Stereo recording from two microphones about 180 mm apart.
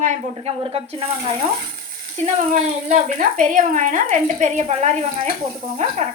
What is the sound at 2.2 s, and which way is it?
Speech, 45° right (ahead or behind).